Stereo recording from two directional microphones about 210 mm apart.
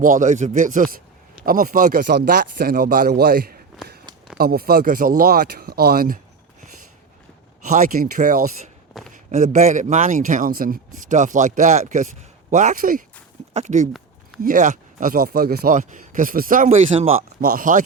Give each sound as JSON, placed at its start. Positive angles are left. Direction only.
{"t": 0.0, "sound": "speech", "side_deg": -40}
{"t": 7.6, "sound": "speech", "side_deg": -40}
{"t": 8.9, "sound": "a sound", "side_deg": 0}
{"t": 9.3, "sound": "speech", "side_deg": -35}